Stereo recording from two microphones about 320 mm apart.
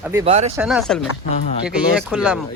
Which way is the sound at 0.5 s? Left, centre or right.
Centre.